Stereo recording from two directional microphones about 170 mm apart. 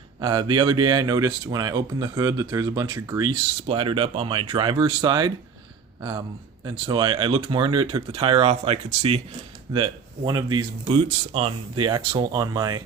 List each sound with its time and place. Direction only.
0.2 s speech: 30° right (ahead or behind)
10.8 s speech: 35° right (ahead or behind)